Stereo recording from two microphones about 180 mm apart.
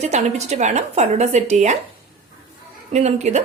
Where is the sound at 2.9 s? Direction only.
40° right (ahead or behind).